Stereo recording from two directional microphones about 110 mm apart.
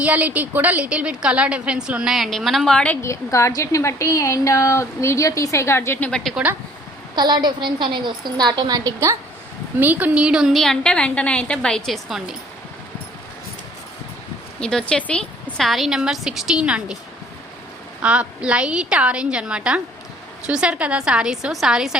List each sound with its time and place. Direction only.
0.0 s a woman's voice: 15° right (ahead or behind); by 3.0 s 10° left (ahead or behind)
3.0 s a woman's voice: 25° left (ahead or behind)
6.1 s a woman's voice: 5° left (ahead or behind)
7.2 s a woman's voice: 40° right (ahead or behind)
9.8 s a woman's voice: 15° right (ahead or behind)
14.6 s a woman's voice: 5° left (ahead or behind); by 17.0 s 10° right (ahead or behind)
18.0 s a woman's voice: 10° right (ahead or behind)